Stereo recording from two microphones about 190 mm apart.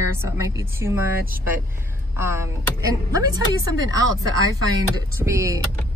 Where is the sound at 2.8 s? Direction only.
15° right (ahead or behind).